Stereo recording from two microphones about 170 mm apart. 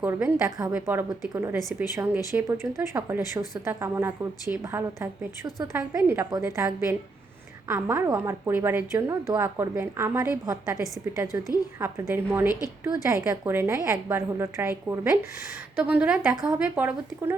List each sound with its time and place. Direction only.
0.0 s a woman's voice: 10° right (ahead or behind)
11.3 s a woman's voice: 20° left (ahead or behind)
11.8 s a woman's voice: 15° right (ahead or behind)
12.5 s a woman's voice: 20° left (ahead or behind)
12.8 s a woman's voice: 15° right (ahead or behind)